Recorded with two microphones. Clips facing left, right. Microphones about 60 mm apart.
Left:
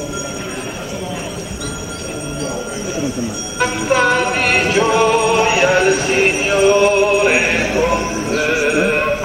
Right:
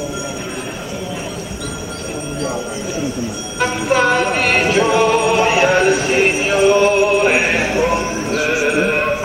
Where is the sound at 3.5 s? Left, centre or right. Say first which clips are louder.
Even; centre.